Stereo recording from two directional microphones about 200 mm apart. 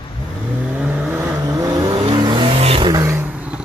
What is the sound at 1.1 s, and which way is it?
Vehicle, 15° right (ahead or behind).